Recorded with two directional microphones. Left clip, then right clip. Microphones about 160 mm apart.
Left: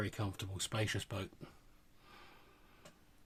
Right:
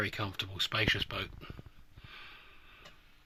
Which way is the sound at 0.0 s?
20° left (ahead or behind).